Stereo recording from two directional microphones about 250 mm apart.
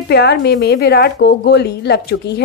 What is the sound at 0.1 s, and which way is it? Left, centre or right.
A woman's voice, left.